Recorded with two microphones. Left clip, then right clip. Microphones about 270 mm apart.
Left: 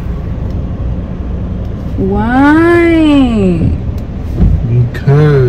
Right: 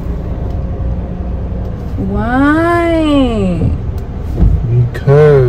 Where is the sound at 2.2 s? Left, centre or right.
Centre.